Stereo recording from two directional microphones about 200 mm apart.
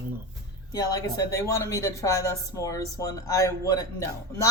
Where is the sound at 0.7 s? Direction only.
15° left (ahead or behind).